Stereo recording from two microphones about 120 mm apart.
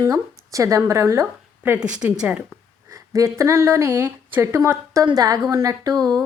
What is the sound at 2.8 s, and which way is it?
A woman's voice, 25° right (ahead or behind).